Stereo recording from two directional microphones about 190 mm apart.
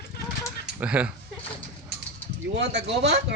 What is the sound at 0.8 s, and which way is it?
Speech, 5° right (ahead or behind).